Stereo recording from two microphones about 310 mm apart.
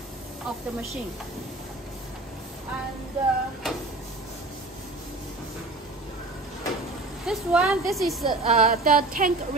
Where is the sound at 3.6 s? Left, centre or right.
Centre.